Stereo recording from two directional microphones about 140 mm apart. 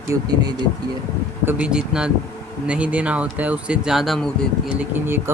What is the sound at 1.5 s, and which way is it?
Speech, 10° right (ahead or behind).